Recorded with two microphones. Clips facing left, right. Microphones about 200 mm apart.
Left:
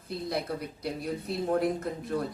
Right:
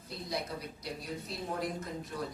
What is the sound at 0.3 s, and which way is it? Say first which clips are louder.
Speech: left 5 dB; 60° left (ahead or behind).